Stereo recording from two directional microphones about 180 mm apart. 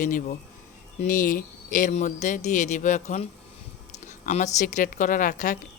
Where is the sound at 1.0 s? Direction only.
50° left (ahead or behind).